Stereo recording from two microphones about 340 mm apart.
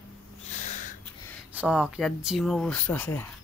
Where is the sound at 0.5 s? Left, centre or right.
Left.